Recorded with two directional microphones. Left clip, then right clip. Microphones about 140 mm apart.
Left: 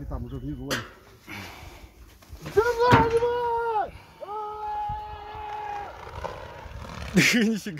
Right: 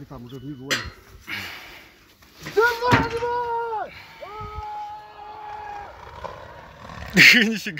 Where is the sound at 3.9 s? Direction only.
5° left (ahead or behind).